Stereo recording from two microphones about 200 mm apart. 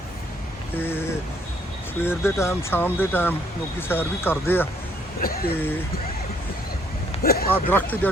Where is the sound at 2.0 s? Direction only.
10° left (ahead or behind).